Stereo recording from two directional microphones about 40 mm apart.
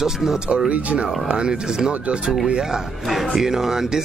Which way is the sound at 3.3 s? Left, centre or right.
Centre.